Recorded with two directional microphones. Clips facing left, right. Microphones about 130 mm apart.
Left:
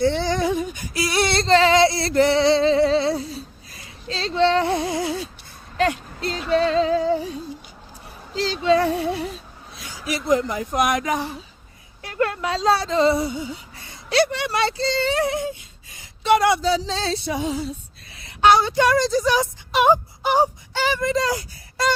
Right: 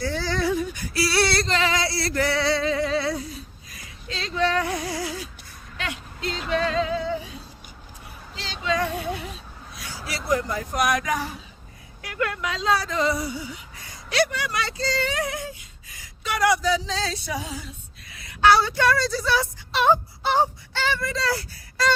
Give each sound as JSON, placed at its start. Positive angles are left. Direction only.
{"t": 0.0, "sound": "female singing", "side_deg": 25}
{"t": 5.7, "sound": "a sound", "side_deg": 40}
{"t": 6.5, "sound": "music", "side_deg": 30}
{"t": 8.4, "sound": "female singing", "side_deg": 35}
{"t": 9.7, "sound": "speech", "side_deg": 20}